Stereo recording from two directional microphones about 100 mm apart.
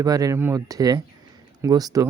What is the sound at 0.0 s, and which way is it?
Speech, 35° right (ahead or behind).